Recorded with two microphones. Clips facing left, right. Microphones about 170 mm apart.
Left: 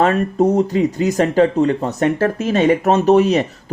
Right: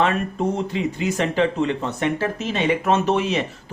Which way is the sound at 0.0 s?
40° left (ahead or behind).